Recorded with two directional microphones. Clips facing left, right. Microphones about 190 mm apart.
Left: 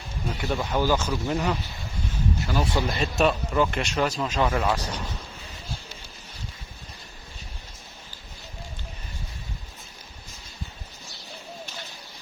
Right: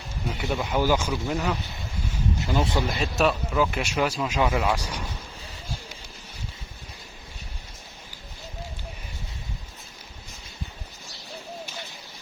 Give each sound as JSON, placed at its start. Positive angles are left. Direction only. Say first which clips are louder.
{"t": 0.4, "sound": "speech", "louder": "even", "side_deg": 0}
{"t": 0.8, "sound": "speech", "louder": "right 1 dB", "side_deg": -10}
{"t": 2.4, "sound": "speech", "louder": "right 2 dB", "side_deg": -20}
{"t": 3.0, "sound": "speech", "louder": "left 2 dB", "side_deg": 0}